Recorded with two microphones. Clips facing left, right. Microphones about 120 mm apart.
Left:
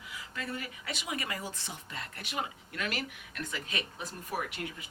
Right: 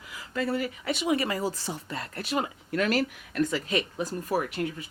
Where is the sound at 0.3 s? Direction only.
35° right (ahead or behind).